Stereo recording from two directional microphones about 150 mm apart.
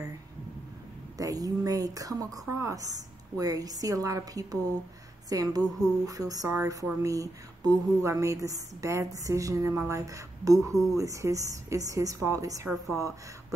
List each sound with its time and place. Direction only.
1.1 s a woman's voice: 25° right (ahead or behind)